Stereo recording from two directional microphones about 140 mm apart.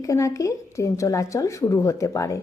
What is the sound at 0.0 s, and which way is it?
Speech, 25° left (ahead or behind).